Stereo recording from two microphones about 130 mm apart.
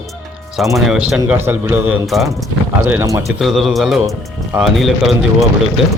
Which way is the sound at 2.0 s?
Centre (ahead or behind).